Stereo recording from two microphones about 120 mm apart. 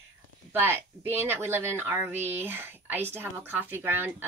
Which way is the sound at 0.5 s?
15° right (ahead or behind).